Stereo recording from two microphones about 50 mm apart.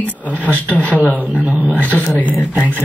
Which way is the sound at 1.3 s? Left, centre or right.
Right.